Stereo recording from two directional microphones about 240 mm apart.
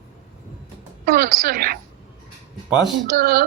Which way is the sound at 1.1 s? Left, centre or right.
Right.